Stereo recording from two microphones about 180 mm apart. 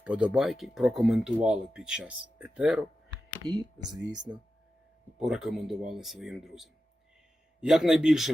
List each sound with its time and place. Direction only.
0.0 s speech: 5° right (ahead or behind)
3.4 s speech: 20° right (ahead or behind)
5.2 s speech: centre (ahead or behind)